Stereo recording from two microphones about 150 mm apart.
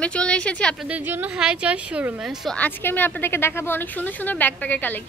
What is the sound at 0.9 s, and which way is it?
A woman's voice, 10° right (ahead or behind).